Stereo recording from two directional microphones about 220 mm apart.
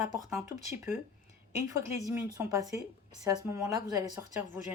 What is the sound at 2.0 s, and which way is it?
Speech, 15° right (ahead or behind).